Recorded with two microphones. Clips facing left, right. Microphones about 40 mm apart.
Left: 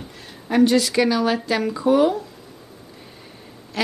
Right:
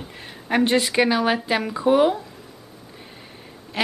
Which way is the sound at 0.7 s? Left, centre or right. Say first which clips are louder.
Left 1 dB; right.